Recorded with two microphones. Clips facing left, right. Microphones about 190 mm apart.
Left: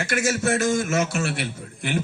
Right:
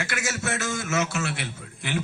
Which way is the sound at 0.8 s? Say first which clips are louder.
Left 3 dB; 50° left (ahead or behind).